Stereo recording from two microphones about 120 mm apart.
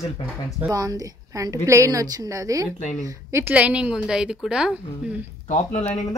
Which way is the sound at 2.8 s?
85° left.